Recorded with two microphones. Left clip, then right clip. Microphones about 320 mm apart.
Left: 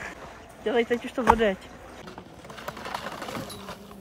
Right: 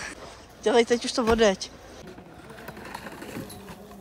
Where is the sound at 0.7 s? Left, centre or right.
Centre.